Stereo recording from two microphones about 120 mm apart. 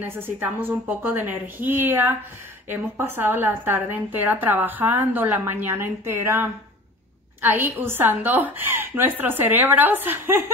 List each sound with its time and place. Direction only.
0.0 s a woman's voice: 15° right (ahead or behind)